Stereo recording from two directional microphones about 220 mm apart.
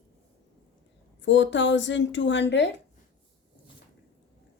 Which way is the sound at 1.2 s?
55° left (ahead or behind).